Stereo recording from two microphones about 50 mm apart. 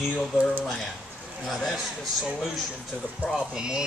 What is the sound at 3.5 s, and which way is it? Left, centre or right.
Speech, centre.